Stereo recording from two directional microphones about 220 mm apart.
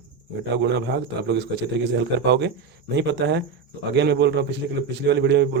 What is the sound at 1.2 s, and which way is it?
A man's voice, 50° right (ahead or behind).